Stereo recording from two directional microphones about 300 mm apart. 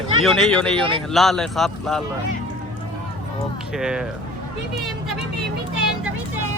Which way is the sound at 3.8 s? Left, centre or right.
Centre.